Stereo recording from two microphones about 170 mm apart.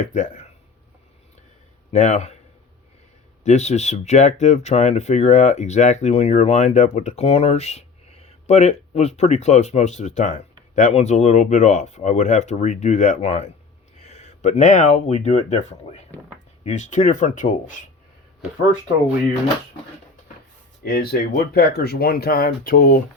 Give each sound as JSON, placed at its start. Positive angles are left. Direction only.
{"t": 0.0, "sound": "speech", "side_deg": 45}
{"t": 1.9, "sound": "a man's voice", "side_deg": 45}
{"t": 3.4, "sound": "speech", "side_deg": 40}
{"t": 20.8, "sound": "speech", "side_deg": 60}